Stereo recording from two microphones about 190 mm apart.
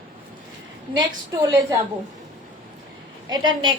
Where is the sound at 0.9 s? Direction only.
25° right (ahead or behind).